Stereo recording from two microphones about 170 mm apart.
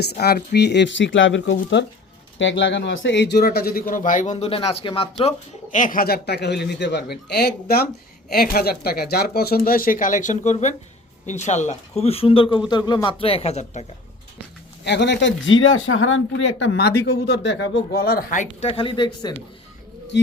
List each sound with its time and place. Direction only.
0.0 s a man's voice: 70° left (ahead or behind); by 5.3 s 30° left (ahead or behind)
5.7 s a man's voice: 50° left (ahead or behind)
14.8 s speech: 90° left; by 18.4 s 55° left (ahead or behind)
18.6 s speech: 30° left (ahead or behind)